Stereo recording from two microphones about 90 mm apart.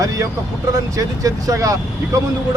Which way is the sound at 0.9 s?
40° right (ahead or behind).